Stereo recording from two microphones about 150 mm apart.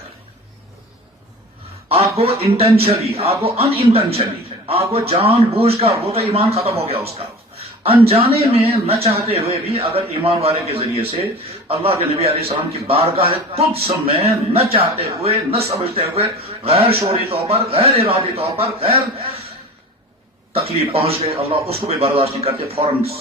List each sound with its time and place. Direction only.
2.6 s a man's voice: 40° right (ahead or behind)
20.5 s a man's voice: 40° right (ahead or behind)